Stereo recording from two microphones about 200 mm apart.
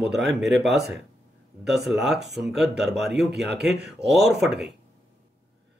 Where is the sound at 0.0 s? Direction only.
Centre (ahead or behind).